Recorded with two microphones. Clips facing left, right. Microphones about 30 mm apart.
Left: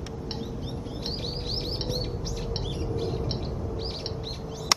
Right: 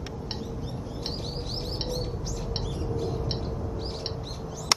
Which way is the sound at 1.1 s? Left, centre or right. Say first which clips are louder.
Left 2 dB; left.